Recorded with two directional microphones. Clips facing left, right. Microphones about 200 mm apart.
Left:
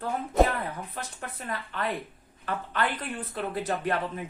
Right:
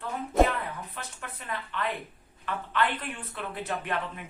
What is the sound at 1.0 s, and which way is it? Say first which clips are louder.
Speech: left 4 dB; 40° left (ahead or behind).